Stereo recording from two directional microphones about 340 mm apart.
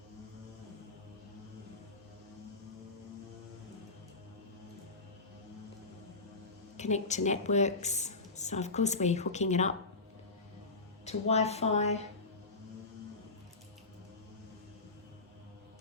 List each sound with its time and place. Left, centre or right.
6.7 s a woman's voice: centre
11.0 s a woman's voice: centre